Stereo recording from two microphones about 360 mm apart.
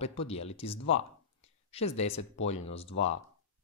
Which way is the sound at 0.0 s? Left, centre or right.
Centre.